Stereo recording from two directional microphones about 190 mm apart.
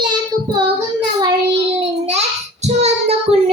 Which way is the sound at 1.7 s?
35° right (ahead or behind).